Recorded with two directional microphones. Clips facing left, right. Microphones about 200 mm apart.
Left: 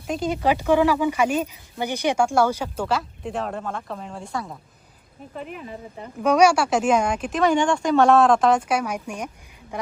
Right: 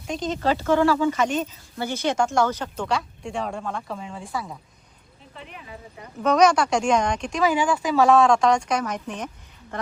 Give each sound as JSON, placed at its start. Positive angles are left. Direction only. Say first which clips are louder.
{"t": 0.1, "sound": "speech", "louder": "left 2 dB", "side_deg": 10}
{"t": 5.3, "sound": "speech", "louder": "left 8 dB", "side_deg": 45}
{"t": 6.2, "sound": "speech", "louder": "left 1 dB", "side_deg": 10}